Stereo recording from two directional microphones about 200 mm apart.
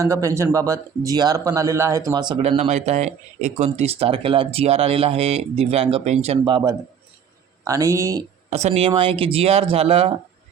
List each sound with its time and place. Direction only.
0.0 s a man's voice: 15° right (ahead or behind)
8.4 s speech: 30° right (ahead or behind)